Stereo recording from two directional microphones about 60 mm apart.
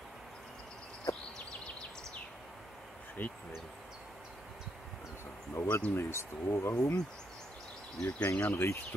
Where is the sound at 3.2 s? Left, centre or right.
Left.